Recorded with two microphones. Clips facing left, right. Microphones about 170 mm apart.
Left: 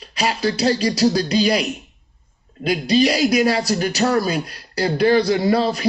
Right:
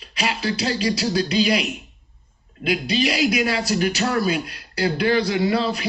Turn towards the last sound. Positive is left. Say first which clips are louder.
# left 3 dB
turn(degrees=40)  # may be behind; listen again after turning